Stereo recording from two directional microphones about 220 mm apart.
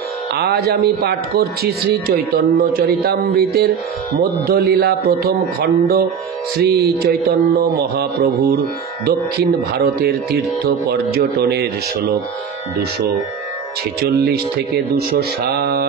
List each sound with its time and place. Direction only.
0.4 s speech: 45° right (ahead or behind)
15.0 s speech: 45° right (ahead or behind)